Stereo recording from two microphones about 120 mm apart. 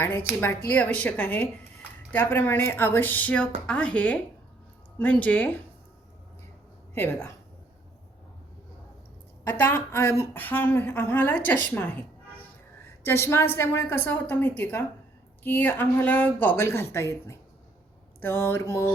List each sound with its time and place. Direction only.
0.3 s speech: 15° left (ahead or behind)
6.9 s speech: 15° left (ahead or behind)
9.5 s speech: 15° left (ahead or behind)